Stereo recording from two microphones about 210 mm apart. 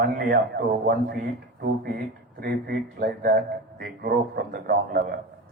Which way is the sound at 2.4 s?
45° right (ahead or behind).